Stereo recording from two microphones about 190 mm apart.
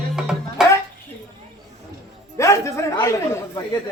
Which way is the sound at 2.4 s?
15° left (ahead or behind).